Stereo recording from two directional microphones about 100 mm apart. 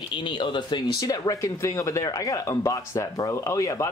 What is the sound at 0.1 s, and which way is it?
Speech, 55° left (ahead or behind).